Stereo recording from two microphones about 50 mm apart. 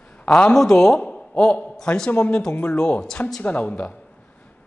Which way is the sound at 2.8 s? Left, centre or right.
Centre.